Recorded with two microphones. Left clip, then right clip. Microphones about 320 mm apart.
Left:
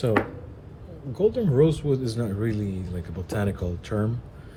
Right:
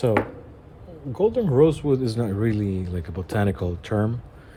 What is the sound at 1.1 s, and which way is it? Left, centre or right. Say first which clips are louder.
Speech: right 2 dB; right.